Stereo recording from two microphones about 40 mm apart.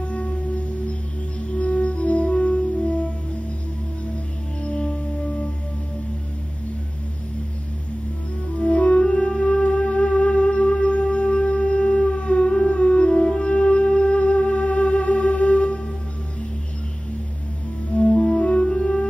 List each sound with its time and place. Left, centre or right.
0.0 s music: left
1.5 s music: left
4.6 s music: left
8.6 s music: left
17.9 s music: left